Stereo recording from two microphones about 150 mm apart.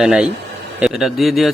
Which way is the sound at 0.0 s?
5° right (ahead or behind).